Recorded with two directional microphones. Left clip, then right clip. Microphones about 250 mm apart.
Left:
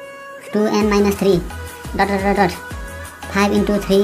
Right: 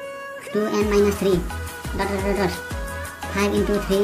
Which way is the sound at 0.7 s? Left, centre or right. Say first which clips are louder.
Left 3 dB; centre.